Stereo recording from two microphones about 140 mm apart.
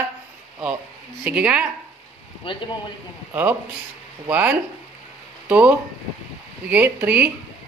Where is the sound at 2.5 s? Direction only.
35° left (ahead or behind).